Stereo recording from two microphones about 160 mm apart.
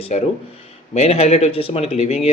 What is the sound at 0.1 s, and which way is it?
A man's voice, 45° left (ahead or behind).